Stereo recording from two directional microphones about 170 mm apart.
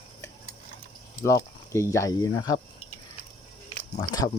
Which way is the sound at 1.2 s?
15° left (ahead or behind).